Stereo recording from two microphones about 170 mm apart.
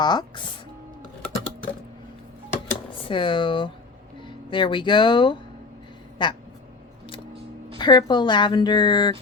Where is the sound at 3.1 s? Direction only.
30° left (ahead or behind).